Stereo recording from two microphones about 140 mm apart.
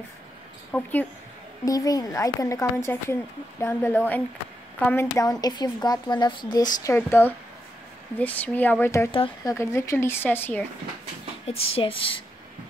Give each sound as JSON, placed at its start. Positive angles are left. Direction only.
{"t": 0.7, "sound": "a woman's voice", "side_deg": 10}
{"t": 1.6, "sound": "a woman's voice", "side_deg": 25}
{"t": 7.0, "sound": "speech", "side_deg": 15}
{"t": 11.4, "sound": "speech", "side_deg": 45}